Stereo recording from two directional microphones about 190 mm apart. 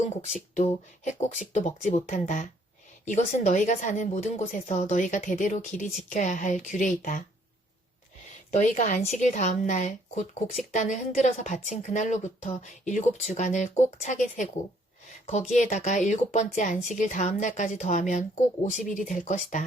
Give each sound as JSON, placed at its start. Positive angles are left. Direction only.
{"t": 0.5, "sound": "a woman's voice", "side_deg": 40}
{"t": 8.4, "sound": "a woman's voice", "side_deg": 40}
{"t": 15.5, "sound": "a woman's voice", "side_deg": 40}